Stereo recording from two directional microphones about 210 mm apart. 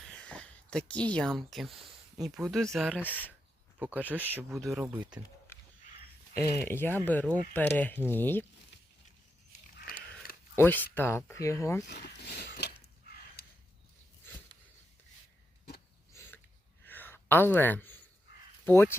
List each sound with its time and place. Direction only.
0.2 s speech: 5° left (ahead or behind)
3.8 s speech: 5° right (ahead or behind)
6.3 s speech: 10° left (ahead or behind)
9.7 s a sound: 45° left (ahead or behind)
10.5 s speech: 10° left (ahead or behind)
11.9 s speech: 55° left (ahead or behind)
12.5 s a sound: 50° left (ahead or behind)
16.1 s a sound: 10° left (ahead or behind)
18.6 s speech: 10° left (ahead or behind)